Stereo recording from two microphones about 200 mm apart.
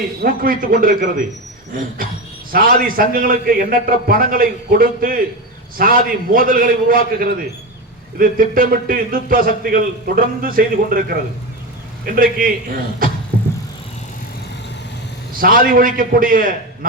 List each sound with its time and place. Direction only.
0.2 s a man's voice: 45° right (ahead or behind)
2.5 s a man's voice: 45° right (ahead or behind)
15.4 s a man's voice: 45° right (ahead or behind)